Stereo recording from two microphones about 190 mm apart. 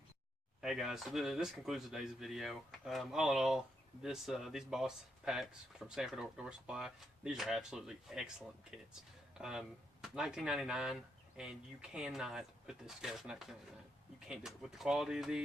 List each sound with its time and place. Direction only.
0.6 s speech: centre (ahead or behind)